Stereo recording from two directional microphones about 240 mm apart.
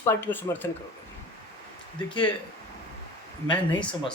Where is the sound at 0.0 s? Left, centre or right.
Centre.